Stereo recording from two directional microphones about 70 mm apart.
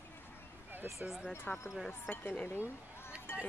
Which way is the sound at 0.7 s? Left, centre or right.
Right.